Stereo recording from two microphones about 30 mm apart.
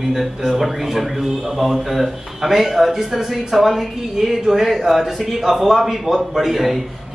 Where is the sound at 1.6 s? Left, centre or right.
Centre.